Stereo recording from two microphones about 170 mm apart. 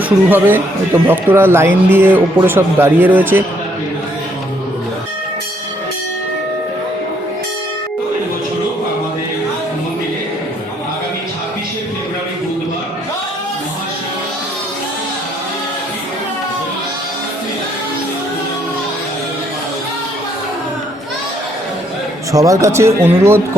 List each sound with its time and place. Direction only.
0.3 s speech: 10° right (ahead or behind)
22.3 s speech: 20° right (ahead or behind)